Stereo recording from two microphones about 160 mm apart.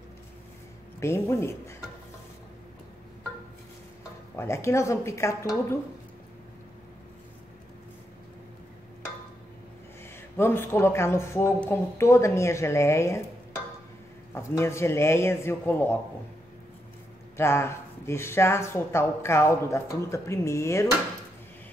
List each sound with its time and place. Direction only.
0.9 s speech: 15° left (ahead or behind)
4.4 s speech: 15° left (ahead or behind)
10.3 s speech: 15° left (ahead or behind)
14.3 s speech: 15° left (ahead or behind)
17.4 s speech: 15° left (ahead or behind)